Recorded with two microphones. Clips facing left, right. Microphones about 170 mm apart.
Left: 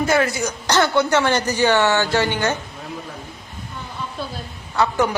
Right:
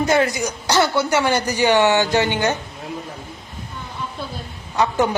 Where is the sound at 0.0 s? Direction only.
20° right (ahead or behind).